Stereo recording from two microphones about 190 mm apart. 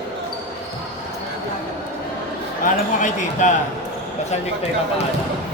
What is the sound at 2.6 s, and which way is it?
Speech, 40° left (ahead or behind).